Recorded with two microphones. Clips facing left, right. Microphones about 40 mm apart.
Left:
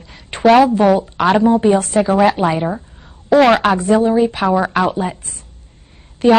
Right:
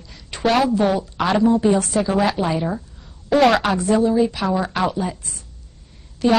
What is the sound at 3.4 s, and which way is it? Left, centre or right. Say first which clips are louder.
A woman's voice: left 4 dB; left.